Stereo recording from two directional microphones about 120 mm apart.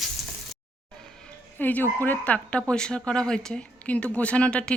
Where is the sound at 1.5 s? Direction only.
15° left (ahead or behind).